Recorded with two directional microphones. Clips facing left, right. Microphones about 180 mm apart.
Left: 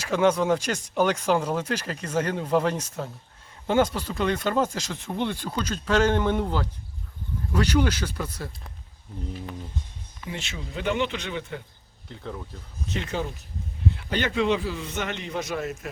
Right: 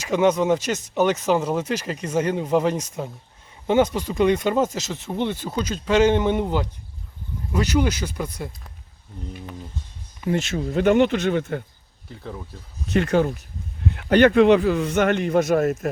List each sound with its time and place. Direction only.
0.0 s speech: 5° right (ahead or behind)
10.2 s speech: 50° right (ahead or behind)
12.0 s speech: 5° right (ahead or behind)
12.9 s a man's voice: 55° right (ahead or behind)